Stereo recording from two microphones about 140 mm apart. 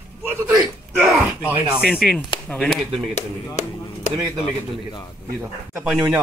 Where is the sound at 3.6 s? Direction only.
55° left (ahead or behind).